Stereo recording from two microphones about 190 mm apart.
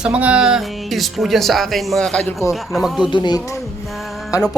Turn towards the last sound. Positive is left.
turn(degrees=15)  # may be behind; listen again after turning